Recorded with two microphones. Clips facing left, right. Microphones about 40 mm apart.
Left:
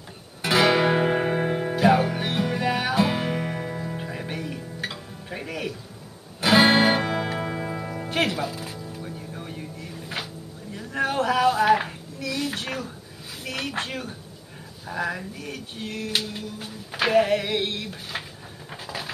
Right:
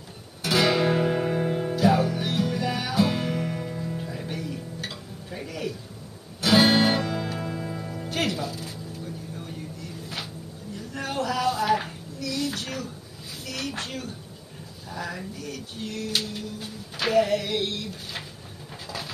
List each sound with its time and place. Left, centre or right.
0.4 s music: left
6.4 s music: left
10.8 s a sound: left